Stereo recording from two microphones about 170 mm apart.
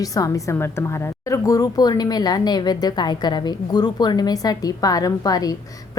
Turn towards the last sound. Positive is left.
turn(degrees=20)  # may be behind; listen again after turning